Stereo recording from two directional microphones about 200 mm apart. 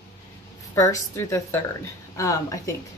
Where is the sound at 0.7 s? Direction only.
15° left (ahead or behind).